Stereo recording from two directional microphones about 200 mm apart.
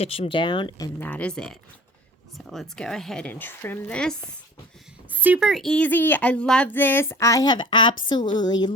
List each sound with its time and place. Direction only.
0.0 s speech: 30° left (ahead or behind)
0.9 s speech: 10° left (ahead or behind)
5.1 s speech: 10° right (ahead or behind); by 8.7 s 20° left (ahead or behind)